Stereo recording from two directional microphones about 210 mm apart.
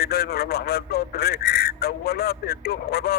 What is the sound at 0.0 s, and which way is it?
Speech, 50° left (ahead or behind).